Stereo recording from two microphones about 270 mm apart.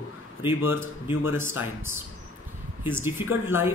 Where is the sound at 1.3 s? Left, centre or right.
Centre.